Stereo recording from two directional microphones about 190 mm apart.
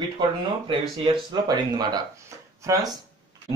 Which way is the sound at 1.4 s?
20° right (ahead or behind).